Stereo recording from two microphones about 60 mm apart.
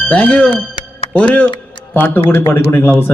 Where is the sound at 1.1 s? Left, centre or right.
Left.